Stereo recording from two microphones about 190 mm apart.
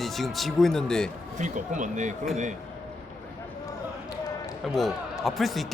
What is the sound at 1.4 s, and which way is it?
Speech, 40° right (ahead or behind).